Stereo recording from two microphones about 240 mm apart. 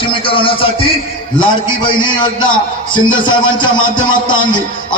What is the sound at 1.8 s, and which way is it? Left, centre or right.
A man's voice, centre.